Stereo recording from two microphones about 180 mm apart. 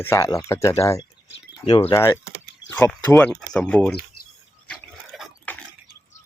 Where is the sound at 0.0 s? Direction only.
15° left (ahead or behind).